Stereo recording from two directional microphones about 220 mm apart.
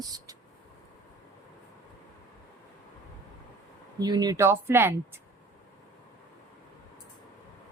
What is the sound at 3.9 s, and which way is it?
Speech, 20° right (ahead or behind).